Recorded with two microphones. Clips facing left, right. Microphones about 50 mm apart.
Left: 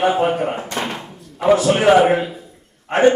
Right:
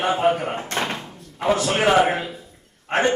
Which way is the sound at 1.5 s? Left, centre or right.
Left.